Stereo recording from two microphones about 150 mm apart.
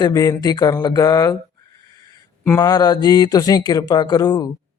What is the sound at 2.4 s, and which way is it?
Speech, 15° left (ahead or behind).